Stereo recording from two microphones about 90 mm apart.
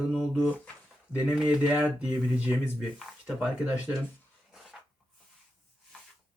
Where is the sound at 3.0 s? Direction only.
Centre (ahead or behind).